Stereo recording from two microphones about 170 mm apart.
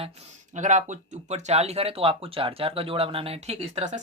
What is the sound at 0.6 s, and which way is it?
Speech, 45° right (ahead or behind).